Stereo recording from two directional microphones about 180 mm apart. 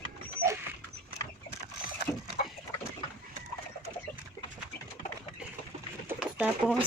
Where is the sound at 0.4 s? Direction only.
60° right (ahead or behind).